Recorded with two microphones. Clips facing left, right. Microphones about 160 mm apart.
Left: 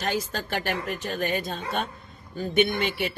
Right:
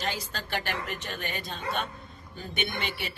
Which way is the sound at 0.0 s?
45° left (ahead or behind).